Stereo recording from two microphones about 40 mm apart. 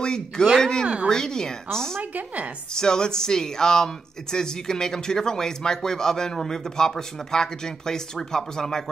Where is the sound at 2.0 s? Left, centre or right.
Right.